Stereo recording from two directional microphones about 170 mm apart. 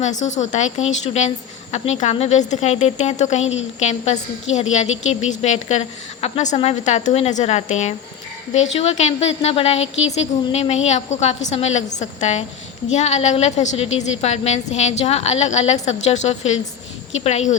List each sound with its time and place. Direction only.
0.0 s a woman's voice: 45° left (ahead or behind)